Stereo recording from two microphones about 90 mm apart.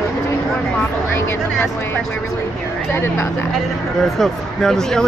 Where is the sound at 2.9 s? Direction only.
25° left (ahead or behind).